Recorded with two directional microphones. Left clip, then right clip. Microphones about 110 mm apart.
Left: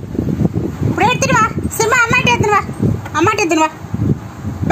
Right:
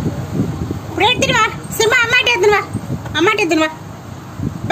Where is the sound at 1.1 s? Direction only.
Centre (ahead or behind).